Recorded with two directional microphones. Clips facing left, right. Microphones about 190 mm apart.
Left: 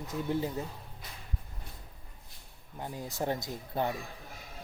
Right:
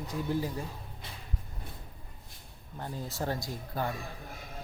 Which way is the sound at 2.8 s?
15° left (ahead or behind).